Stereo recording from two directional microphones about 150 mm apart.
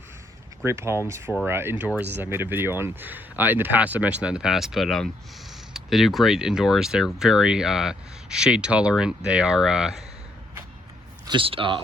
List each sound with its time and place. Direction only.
0.6 s speech: 15° right (ahead or behind)
11.3 s speech: 35° right (ahead or behind)